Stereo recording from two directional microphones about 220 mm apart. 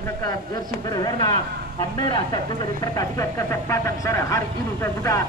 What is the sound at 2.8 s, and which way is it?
Speech, 15° left (ahead or behind).